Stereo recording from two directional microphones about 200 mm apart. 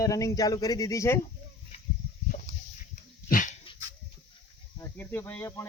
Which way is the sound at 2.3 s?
35° left (ahead or behind).